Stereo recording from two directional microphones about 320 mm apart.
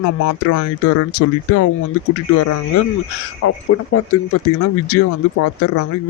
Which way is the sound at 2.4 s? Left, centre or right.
Left.